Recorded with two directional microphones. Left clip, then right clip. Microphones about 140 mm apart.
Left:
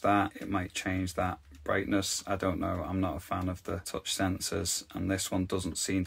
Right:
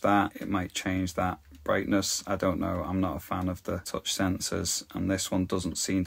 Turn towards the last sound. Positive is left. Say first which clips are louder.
# right 2 dB
turn(degrees=-25)  # may be behind; listen again after turning